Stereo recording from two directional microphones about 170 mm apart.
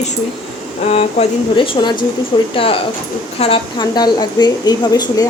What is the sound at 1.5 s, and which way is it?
A woman's voice, 30° left (ahead or behind).